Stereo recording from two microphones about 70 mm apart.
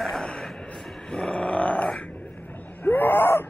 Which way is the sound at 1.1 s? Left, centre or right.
Centre.